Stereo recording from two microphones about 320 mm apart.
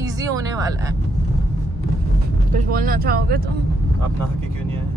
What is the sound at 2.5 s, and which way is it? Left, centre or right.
Speech, right.